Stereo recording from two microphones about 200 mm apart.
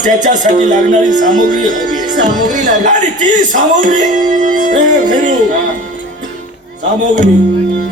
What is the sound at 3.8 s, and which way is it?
Speech, 40° right (ahead or behind).